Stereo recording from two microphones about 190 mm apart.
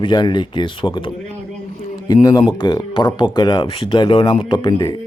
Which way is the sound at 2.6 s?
20° left (ahead or behind).